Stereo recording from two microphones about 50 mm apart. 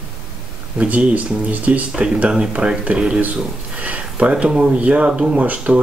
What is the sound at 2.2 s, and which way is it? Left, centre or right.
Speech, centre.